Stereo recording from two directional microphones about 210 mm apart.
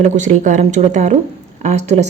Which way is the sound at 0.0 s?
35° right (ahead or behind).